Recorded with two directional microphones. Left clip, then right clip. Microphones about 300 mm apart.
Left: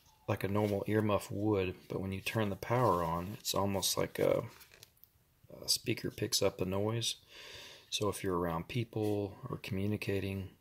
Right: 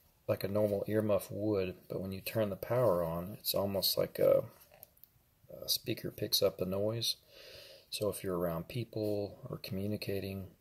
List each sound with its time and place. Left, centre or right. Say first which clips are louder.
0.3 s speech: right 2 dB; left
5.6 s speech: left 1 dB; left
7.3 s a sound: left 3 dB; left
8.0 s speech: even; left